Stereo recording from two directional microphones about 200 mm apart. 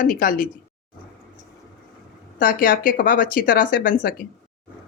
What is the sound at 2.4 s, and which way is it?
Speech, 45° left (ahead or behind).